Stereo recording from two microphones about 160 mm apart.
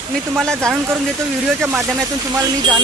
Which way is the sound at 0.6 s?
20° right (ahead or behind).